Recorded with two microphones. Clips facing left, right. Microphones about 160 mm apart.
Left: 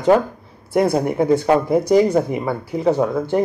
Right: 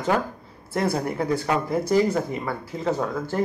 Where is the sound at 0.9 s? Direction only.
20° left (ahead or behind).